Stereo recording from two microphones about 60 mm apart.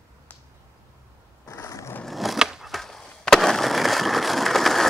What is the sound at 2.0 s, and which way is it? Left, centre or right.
Skateboard, centre.